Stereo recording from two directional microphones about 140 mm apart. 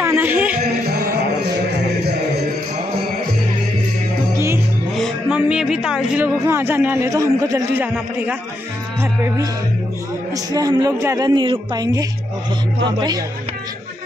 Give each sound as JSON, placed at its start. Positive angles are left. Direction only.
{"t": 0.0, "sound": "speech", "side_deg": -15}
{"t": 5.3, "sound": "speech", "side_deg": -5}
{"t": 10.3, "sound": "a woman's voice", "side_deg": -25}